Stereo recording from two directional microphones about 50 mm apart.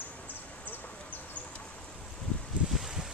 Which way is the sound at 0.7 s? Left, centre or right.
Left.